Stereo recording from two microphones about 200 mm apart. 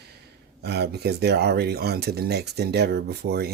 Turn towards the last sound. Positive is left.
turn(degrees=-55)  # may be behind; listen again after turning